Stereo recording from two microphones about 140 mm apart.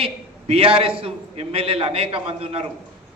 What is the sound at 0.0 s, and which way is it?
A man's voice, 45° right (ahead or behind).